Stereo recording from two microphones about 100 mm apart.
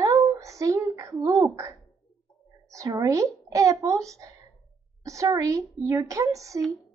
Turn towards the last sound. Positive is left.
turn(degrees=-35)  # may be behind; listen again after turning